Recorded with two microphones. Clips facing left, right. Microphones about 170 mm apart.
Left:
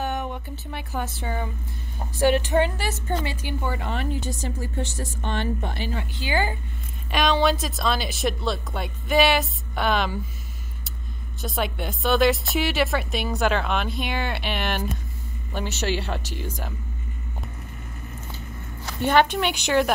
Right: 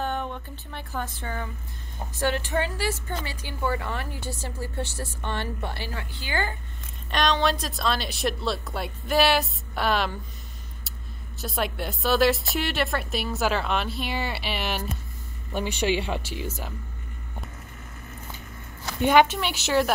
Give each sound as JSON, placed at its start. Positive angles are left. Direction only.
{"t": 0.0, "sound": "a sound", "side_deg": 10}
{"t": 1.2, "sound": "a woman's voice", "side_deg": 15}
{"t": 7.1, "sound": "a woman's voice", "side_deg": 5}
{"t": 11.4, "sound": "a woman's voice", "side_deg": 0}
{"t": 16.0, "sound": "speech", "side_deg": -10}
{"t": 19.0, "sound": "a woman's voice", "side_deg": -10}